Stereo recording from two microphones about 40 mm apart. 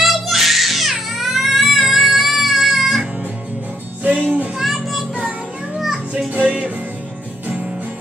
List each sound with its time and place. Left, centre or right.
0.0 s music: centre
4.0 s music: right
4.6 s music: centre
6.4 s music: right